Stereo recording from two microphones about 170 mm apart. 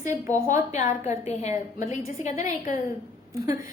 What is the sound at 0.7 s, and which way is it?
A woman's voice, 40° left (ahead or behind).